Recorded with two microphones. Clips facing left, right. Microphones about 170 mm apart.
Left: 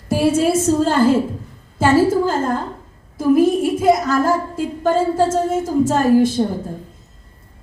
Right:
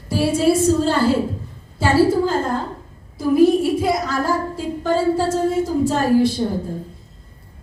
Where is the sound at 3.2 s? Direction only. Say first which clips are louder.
Even; 45° left (ahead or behind).